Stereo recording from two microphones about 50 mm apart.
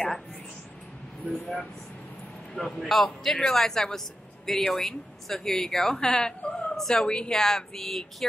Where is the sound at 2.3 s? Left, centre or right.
Centre.